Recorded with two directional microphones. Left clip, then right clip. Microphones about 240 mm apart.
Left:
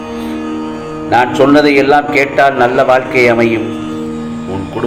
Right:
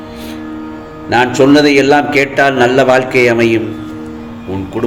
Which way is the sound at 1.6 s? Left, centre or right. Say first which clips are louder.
Even; right.